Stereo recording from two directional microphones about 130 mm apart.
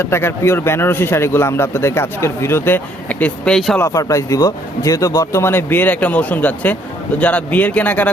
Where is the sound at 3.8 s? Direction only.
25° left (ahead or behind).